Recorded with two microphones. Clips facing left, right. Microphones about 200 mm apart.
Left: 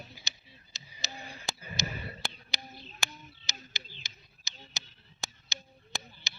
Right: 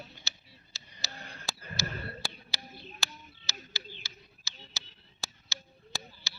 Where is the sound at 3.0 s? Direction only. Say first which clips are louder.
Even; 20° left (ahead or behind).